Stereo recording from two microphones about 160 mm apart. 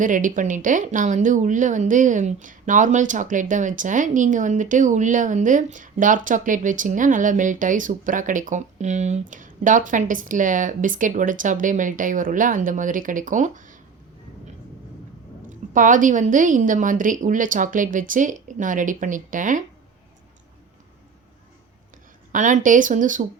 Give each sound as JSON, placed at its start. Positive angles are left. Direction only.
{"t": 0.0, "sound": "speech", "side_deg": -55}
{"t": 15.4, "sound": "a woman's voice", "side_deg": -55}
{"t": 22.3, "sound": "speech", "side_deg": -50}